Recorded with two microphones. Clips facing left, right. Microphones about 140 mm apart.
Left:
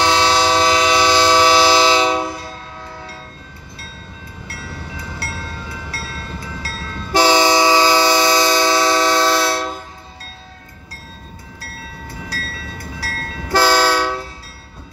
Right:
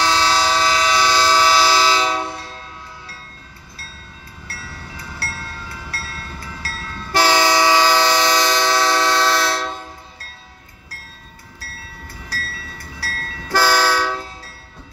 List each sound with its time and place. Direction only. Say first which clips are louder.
0.0 s train: left 3 dB; 25° left (ahead or behind)
4.5 s train: left 4 dB; 20° left (ahead or behind)
13.0 s train: left 2 dB; 15° left (ahead or behind)